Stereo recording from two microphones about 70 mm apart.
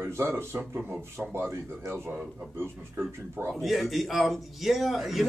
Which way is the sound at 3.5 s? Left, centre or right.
Centre.